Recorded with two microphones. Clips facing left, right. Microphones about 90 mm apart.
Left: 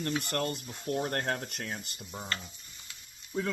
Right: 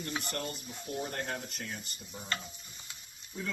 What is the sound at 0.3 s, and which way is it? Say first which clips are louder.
Speech: left 5 dB; 70° left (ahead or behind).